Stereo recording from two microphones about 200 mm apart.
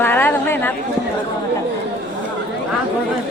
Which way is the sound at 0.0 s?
10° left (ahead or behind).